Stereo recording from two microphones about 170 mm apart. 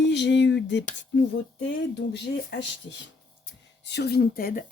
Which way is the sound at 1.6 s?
85° left.